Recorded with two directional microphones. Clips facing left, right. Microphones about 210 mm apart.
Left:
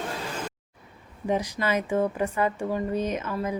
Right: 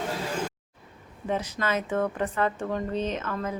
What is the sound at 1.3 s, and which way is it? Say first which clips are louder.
Speech: left 2 dB; 10° left (ahead or behind).